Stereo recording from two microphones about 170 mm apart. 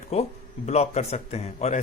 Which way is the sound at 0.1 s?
40° left (ahead or behind).